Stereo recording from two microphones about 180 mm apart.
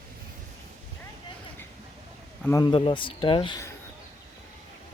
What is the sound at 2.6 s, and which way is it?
Speech, 25° left (ahead or behind).